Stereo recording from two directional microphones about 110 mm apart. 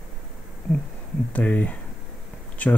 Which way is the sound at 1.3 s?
15° left (ahead or behind).